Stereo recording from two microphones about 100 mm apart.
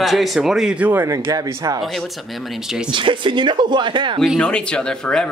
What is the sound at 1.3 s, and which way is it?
Speech, 35° right (ahead or behind).